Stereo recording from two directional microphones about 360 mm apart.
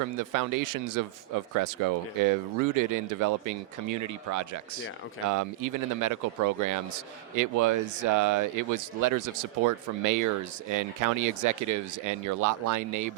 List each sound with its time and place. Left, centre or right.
0.2 s speech: right